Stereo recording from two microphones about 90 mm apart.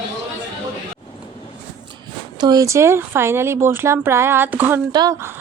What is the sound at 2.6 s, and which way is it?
Speech, 30° right (ahead or behind).